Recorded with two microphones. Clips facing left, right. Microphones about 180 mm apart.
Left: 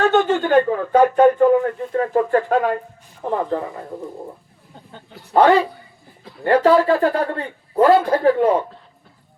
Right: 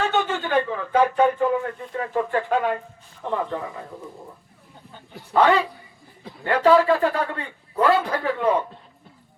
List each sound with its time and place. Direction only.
0.1 s a man's voice: 40° left (ahead or behind)
5.3 s a man's voice: 40° left (ahead or behind)